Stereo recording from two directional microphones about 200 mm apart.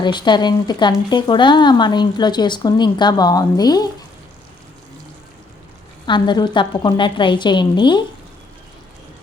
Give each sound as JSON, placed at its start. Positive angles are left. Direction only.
{"t": 0.0, "sound": "speech", "side_deg": 20}
{"t": 6.1, "sound": "speech", "side_deg": 20}